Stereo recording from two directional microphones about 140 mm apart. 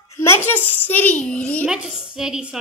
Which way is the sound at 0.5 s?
15° left (ahead or behind).